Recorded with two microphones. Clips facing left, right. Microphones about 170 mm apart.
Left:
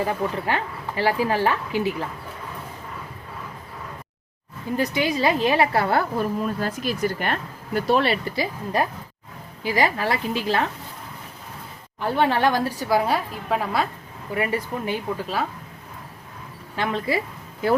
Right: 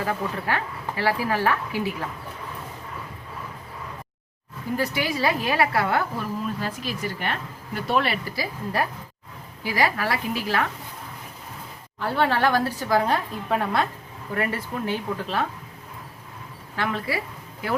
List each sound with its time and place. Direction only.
0.0 s speech: 20° left (ahead or behind)
4.8 s speech: 20° left (ahead or behind)
6.6 s speech: 50° left (ahead or behind); by 10.7 s 25° left (ahead or behind)
11.9 s a woman's voice: 15° left (ahead or behind)
14.3 s a woman's voice: 15° left (ahead or behind)
16.7 s speech: 20° left (ahead or behind)